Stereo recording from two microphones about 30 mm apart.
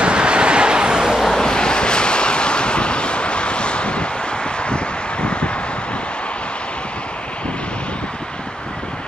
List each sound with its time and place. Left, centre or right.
0.0 s vehicle: right
1.4 s vehicle: left
4.6 s wind: left